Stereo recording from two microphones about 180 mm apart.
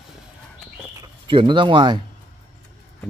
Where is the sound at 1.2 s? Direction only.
25° right (ahead or behind).